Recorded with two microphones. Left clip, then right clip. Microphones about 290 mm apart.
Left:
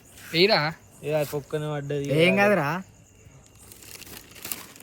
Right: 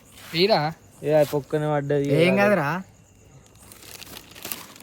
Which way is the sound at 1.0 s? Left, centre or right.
Right.